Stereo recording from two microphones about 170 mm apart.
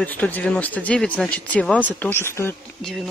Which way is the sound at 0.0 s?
10° left (ahead or behind).